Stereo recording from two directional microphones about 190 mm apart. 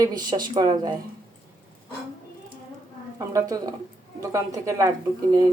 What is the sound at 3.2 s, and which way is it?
Speech, 20° right (ahead or behind).